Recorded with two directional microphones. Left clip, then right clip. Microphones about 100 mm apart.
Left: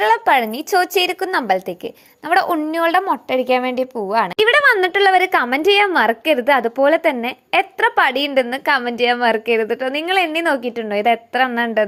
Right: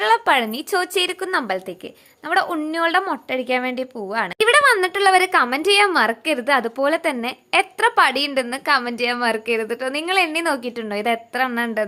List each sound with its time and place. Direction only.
0.0 s a woman's voice: 15° left (ahead or behind); by 2.6 s 35° left (ahead or behind)
2.7 s a woman's voice: 15° left (ahead or behind)
4.4 s a woman's voice: 30° left (ahead or behind)